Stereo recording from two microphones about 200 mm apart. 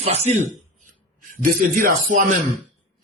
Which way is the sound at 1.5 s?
45° right (ahead or behind).